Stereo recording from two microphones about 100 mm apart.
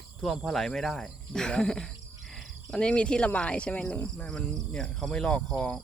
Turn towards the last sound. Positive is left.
turn(degrees=10)  # may be behind; listen again after turning